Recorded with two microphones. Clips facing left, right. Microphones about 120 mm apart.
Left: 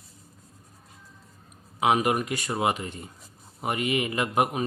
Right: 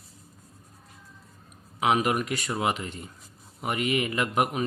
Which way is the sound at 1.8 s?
40° left (ahead or behind).